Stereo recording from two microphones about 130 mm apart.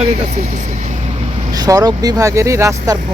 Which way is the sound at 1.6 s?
30° right (ahead or behind).